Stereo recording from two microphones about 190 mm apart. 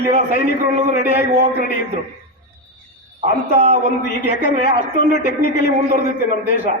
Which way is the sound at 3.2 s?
35° right (ahead or behind).